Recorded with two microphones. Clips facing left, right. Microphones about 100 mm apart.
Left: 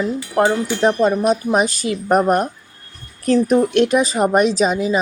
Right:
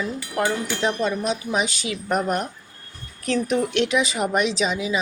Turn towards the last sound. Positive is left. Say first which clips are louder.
# left 7 dB
turn(degrees=45)  # may be behind; listen again after turning